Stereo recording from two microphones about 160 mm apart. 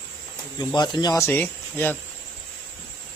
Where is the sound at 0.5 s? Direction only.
25° left (ahead or behind).